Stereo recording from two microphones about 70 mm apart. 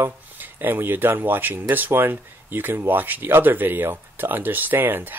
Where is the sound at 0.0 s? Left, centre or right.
Right.